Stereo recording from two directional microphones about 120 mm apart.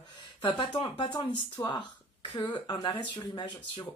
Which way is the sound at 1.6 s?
30° left (ahead or behind).